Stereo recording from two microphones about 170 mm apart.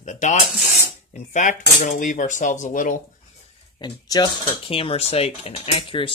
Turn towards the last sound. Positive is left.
turn(degrees=30)  # may be behind; listen again after turning